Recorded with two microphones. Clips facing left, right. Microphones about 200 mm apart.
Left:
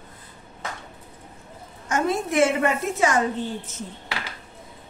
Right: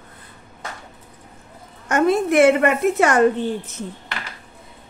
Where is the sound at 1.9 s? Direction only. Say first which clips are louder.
Right 6 dB; 65° right (ahead or behind).